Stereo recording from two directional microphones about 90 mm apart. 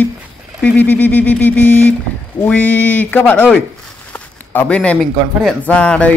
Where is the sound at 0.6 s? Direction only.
15° left (ahead or behind).